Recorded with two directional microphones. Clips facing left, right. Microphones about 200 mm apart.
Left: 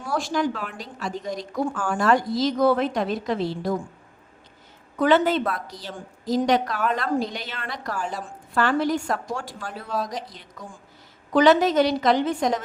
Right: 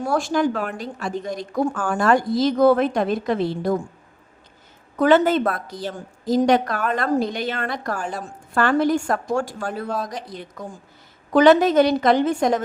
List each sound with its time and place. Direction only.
0.0 s a woman's voice: 50° right (ahead or behind)
4.9 s a woman's voice: 45° right (ahead or behind)